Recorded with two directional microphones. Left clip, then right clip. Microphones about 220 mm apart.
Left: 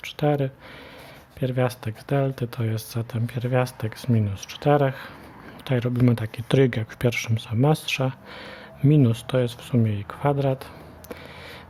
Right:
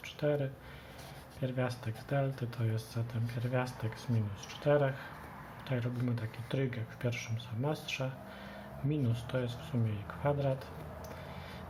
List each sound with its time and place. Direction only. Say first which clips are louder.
0.0 s speech: left 10 dB; 50° left (ahead or behind)